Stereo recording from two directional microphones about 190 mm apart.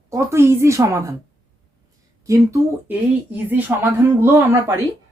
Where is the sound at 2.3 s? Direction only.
15° right (ahead or behind).